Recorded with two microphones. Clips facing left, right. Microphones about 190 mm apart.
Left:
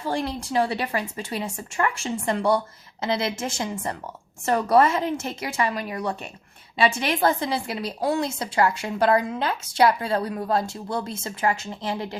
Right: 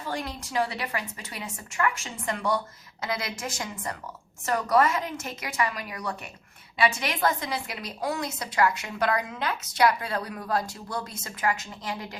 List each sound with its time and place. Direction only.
0.0 s a woman's voice: 30° left (ahead or behind)